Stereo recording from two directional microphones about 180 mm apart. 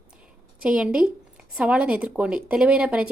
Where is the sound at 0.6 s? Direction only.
5° right (ahead or behind).